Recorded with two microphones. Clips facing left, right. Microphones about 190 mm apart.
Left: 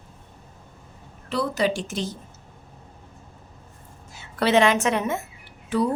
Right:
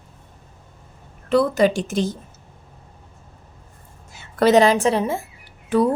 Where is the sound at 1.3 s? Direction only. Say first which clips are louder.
Right 7 dB; 50° right (ahead or behind).